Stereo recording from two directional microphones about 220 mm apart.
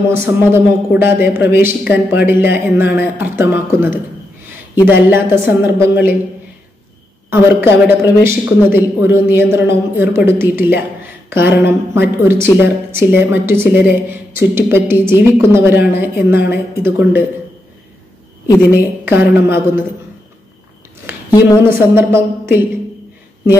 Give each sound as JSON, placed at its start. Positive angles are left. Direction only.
{"t": 0.1, "sound": "a man's voice", "side_deg": -10}
{"t": 7.2, "sound": "a man's voice", "side_deg": -10}
{"t": 18.7, "sound": "a man's voice", "side_deg": -10}
{"t": 21.3, "sound": "a woman's voice", "side_deg": 15}
{"t": 21.6, "sound": "a man's voice", "side_deg": -10}